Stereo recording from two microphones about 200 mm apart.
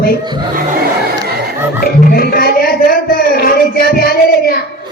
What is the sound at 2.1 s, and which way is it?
Music, 50° left (ahead or behind).